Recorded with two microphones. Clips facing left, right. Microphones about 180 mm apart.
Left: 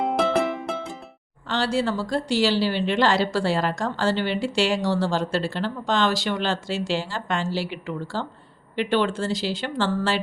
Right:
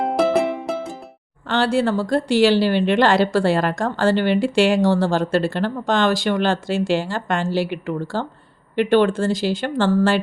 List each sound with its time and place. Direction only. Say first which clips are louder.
0.3 s music: right 4 dB; 10° right (ahead or behind)
1.5 s a woman's voice: right 5 dB; 55° right (ahead or behind)